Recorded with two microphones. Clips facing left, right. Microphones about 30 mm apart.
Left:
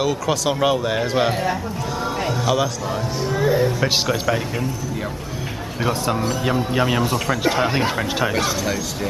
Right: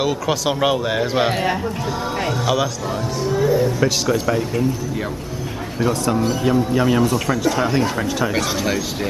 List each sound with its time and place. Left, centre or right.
0.0 s a man's voice: centre
3.3 s speech: left
3.8 s speech: centre
5.8 s speech: centre